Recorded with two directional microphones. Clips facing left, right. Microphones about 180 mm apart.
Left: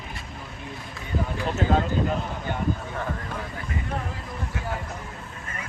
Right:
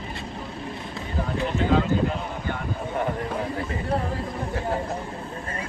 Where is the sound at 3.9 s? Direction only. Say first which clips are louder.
Right 8 dB; 35° right (ahead or behind).